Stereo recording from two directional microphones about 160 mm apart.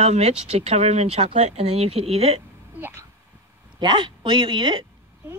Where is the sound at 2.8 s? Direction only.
15° right (ahead or behind).